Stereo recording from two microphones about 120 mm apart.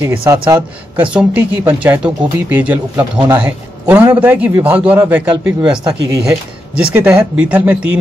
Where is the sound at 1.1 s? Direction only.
15° right (ahead or behind).